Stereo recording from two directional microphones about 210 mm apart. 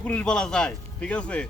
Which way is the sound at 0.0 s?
5° left (ahead or behind).